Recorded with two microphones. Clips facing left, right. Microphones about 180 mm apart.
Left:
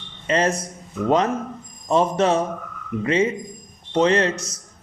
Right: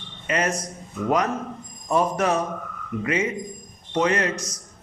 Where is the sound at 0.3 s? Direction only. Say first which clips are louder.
Left 4 dB; 30° left (ahead or behind).